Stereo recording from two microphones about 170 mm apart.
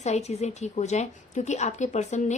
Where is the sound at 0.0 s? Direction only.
40° left (ahead or behind).